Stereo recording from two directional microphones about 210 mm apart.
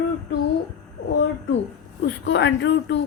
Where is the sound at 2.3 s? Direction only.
60° left (ahead or behind).